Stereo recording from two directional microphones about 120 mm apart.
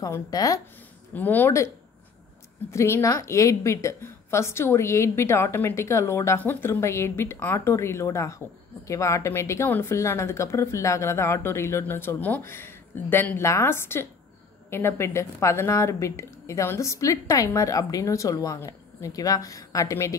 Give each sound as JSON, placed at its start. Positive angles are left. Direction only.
{"t": 0.0, "sound": "a woman's voice", "side_deg": 30}
{"t": 1.1, "sound": "speech", "side_deg": 15}
{"t": 2.7, "sound": "a woman's voice", "side_deg": 25}